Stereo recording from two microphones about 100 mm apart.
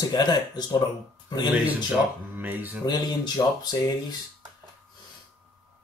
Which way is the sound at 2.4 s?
20° right (ahead or behind).